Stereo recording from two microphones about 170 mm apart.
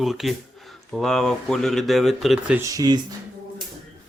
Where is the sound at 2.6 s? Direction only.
20° right (ahead or behind).